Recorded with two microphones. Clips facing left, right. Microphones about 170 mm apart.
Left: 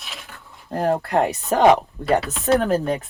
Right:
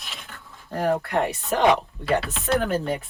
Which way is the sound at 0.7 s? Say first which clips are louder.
Left 3 dB; 30° left (ahead or behind).